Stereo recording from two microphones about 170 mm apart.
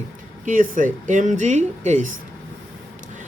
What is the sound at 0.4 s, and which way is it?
A woman's voice, 50° right (ahead or behind).